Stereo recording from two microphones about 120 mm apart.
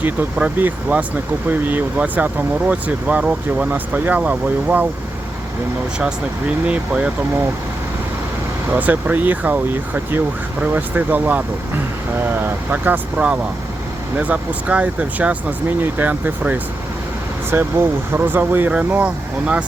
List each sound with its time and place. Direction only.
0.0 s speech: 15° right (ahead or behind)
6.7 s speech: 10° right (ahead or behind)
8.7 s speech: 15° right (ahead or behind)